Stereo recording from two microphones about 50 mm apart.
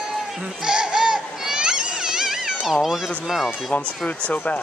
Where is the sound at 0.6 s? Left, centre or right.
Centre.